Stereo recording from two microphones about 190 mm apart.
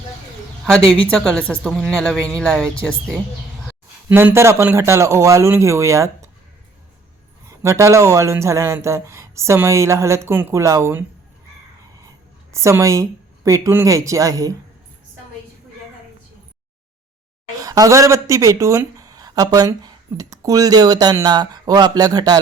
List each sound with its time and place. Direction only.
1.0 s a woman's voice: 5° left (ahead or behind)
4.1 s speech: 10° right (ahead or behind)
7.4 s speech: 15° right (ahead or behind)
12.5 s speech: 15° right (ahead or behind)
17.6 s speech: 20° right (ahead or behind)